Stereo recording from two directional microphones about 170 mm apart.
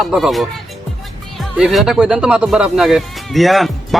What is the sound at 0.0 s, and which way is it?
Speech, centre (ahead or behind).